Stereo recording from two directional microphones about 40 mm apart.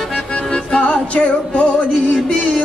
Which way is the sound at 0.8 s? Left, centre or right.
Left.